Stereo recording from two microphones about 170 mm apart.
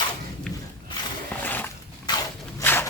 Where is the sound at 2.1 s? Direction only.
20° left (ahead or behind).